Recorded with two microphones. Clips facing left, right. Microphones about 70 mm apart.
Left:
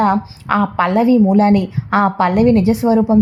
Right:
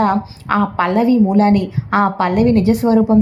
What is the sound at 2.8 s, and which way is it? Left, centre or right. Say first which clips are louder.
Speech: even; centre.